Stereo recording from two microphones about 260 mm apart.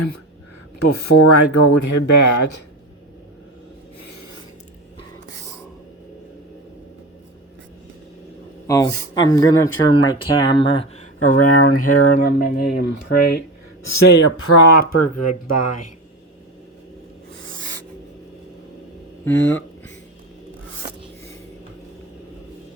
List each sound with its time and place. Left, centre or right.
0.9 s speech: left
8.6 s speech: centre
11.3 s speech: left
12.2 s speech: left
14.0 s speech: left
14.9 s speech: left
19.2 s speech: centre